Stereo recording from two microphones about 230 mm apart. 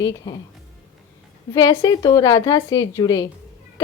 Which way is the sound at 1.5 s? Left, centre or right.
Centre.